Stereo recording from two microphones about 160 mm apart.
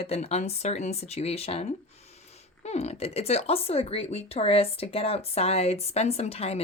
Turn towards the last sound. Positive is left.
turn(degrees=40)  # may be behind; listen again after turning